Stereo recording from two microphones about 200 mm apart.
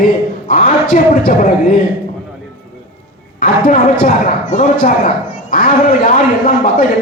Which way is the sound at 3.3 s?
45° left (ahead or behind).